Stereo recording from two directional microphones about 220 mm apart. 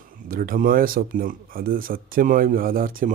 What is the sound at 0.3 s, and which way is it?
Speech, 40° right (ahead or behind).